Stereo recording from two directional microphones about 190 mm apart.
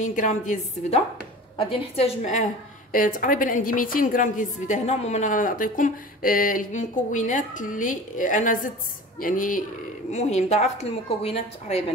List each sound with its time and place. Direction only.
0.0 s a woman's voice: 40° left (ahead or behind)
2.9 s a woman's voice: 45° left (ahead or behind)